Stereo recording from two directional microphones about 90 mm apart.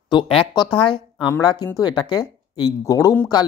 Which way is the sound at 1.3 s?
45° left (ahead or behind).